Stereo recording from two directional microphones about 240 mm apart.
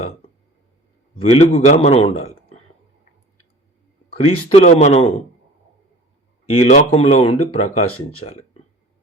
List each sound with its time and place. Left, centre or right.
1.1 s a man's voice: left
4.3 s speech: left
6.5 s speech: left